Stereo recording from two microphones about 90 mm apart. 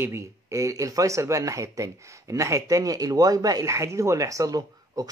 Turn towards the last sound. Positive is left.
turn(degrees=-45)  # may be behind; listen again after turning